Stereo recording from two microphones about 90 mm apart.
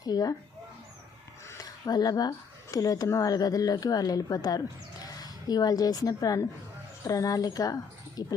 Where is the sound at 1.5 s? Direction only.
45° left (ahead or behind).